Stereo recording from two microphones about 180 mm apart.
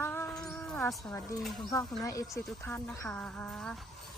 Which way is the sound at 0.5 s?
5° left (ahead or behind).